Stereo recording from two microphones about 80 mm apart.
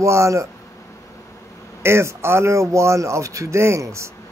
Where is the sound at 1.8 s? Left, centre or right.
Right.